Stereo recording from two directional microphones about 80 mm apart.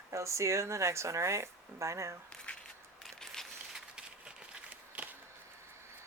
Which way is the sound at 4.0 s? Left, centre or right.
Centre.